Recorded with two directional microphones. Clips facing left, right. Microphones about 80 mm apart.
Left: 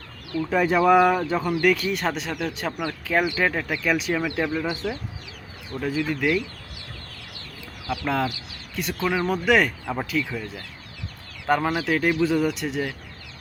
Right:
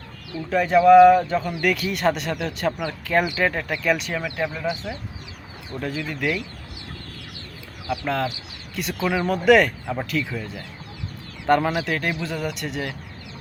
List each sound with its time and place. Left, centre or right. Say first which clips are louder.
0.5 s speech: right 5 dB; centre
4.8 s speech: left 3 dB; centre
5.8 s speech: left 2 dB; centre
8.0 s speech: left 1 dB; centre